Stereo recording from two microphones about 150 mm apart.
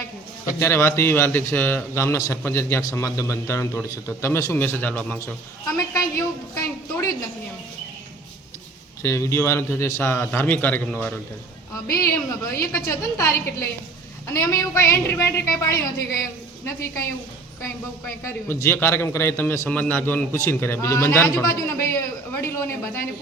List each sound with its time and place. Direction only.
0.6 s a man's voice: 15° left (ahead or behind)
5.7 s a woman's voice: 20° left (ahead or behind)
9.0 s a man's voice: 20° left (ahead or behind)
11.7 s a woman's voice: 20° left (ahead or behind)
18.4 s a man's voice: 15° left (ahead or behind)